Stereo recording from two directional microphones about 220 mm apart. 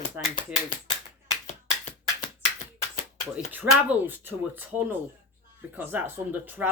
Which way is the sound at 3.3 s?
10° right (ahead or behind).